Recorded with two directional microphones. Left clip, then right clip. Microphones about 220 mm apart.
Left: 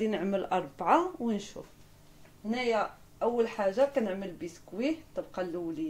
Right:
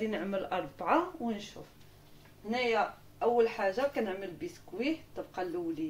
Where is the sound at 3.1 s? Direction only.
45° left (ahead or behind).